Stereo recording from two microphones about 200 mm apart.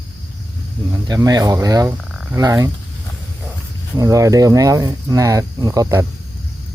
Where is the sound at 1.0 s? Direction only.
20° right (ahead or behind).